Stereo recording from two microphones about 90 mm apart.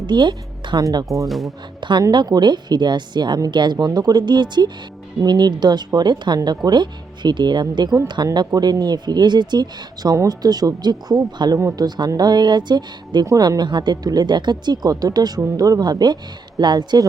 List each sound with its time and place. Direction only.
0.1 s speech: 55° right (ahead or behind)
0.8 s speech: 40° right (ahead or behind)
1.0 s speech: centre (ahead or behind)
1.8 s a woman's voice: 55° right (ahead or behind)
13.2 s speech: 40° right (ahead or behind)